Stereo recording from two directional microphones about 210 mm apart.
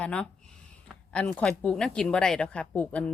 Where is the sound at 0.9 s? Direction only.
5° left (ahead or behind).